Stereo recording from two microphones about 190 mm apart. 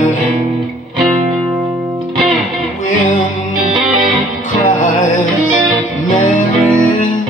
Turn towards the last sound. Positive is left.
turn(degrees=45)  # may be behind; listen again after turning